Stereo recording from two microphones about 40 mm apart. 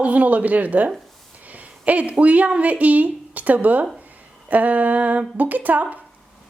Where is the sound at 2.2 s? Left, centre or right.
Right.